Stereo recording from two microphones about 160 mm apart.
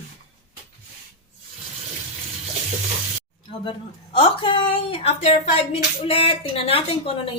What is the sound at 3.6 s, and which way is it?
A woman's voice, 30° left (ahead or behind).